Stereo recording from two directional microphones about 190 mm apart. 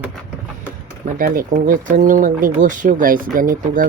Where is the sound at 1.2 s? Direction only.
50° right (ahead or behind).